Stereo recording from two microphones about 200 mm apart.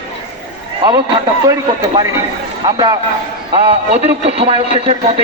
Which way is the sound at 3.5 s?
30° right (ahead or behind).